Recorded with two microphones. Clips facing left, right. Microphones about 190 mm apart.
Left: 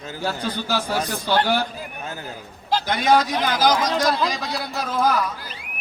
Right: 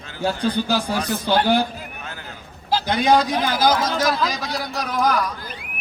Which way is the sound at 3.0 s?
10° right (ahead or behind).